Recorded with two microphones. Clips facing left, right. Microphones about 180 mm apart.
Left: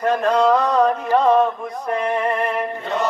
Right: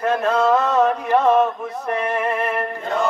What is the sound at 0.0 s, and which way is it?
Mantra, 5° right (ahead or behind).